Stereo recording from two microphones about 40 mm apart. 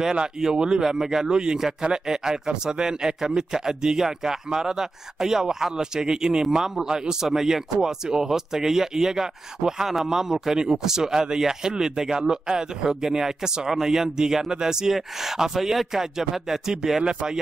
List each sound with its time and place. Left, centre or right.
0.0 s a man's voice: centre